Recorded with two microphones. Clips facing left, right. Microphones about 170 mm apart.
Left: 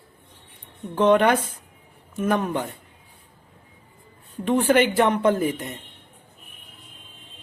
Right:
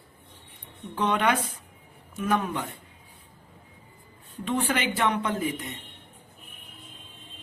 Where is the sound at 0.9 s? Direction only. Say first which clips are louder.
Left 7 dB; 45° left (ahead or behind).